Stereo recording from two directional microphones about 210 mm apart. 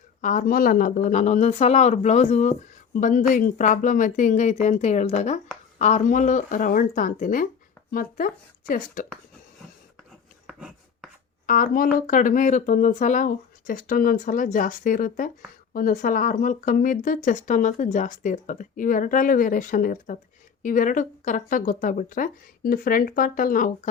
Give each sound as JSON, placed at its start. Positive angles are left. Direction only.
{"t": 0.2, "sound": "speech", "side_deg": 40}
{"t": 10.4, "sound": "a sound", "side_deg": -5}
{"t": 11.4, "sound": "speech", "side_deg": 40}